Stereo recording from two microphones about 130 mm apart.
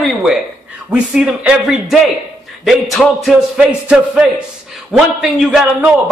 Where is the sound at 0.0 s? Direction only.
Centre (ahead or behind).